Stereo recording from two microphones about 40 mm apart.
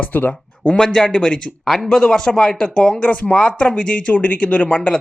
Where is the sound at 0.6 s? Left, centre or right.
Left.